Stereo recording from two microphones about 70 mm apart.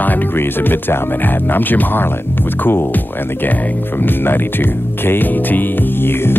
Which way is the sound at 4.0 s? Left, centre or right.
Left.